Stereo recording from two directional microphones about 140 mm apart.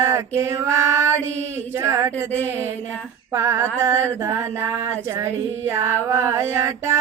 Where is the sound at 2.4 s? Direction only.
15° right (ahead or behind).